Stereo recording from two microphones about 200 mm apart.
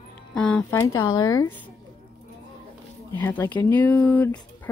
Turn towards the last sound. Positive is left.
turn(degrees=10)  # may be behind; listen again after turning